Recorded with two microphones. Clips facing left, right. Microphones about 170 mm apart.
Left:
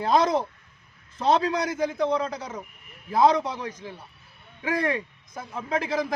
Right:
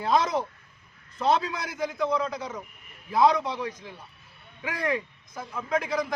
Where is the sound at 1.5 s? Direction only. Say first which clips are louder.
Left 6 dB; 30° left (ahead or behind).